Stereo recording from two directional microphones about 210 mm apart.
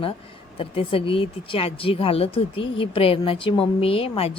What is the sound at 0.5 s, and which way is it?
Speech, 25° left (ahead or behind).